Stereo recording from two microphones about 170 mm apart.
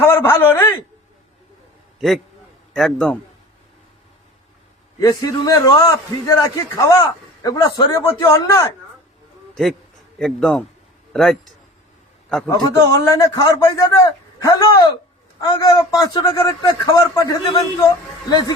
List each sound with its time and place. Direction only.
0.0 s a man's voice: 15° left (ahead or behind)
2.0 s a man's voice: centre (ahead or behind)
4.9 s a man's voice: 20° left (ahead or behind)
10.2 s a man's voice: 5° left (ahead or behind)
12.5 s a man's voice: 20° left (ahead or behind)